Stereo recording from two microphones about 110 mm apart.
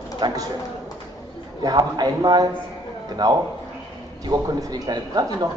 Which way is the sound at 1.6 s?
35° right (ahead or behind).